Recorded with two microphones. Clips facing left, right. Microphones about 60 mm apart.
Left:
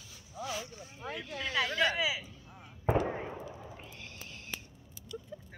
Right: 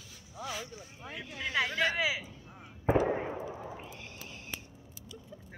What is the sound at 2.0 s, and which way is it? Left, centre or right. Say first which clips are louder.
Speech: right 1 dB; right.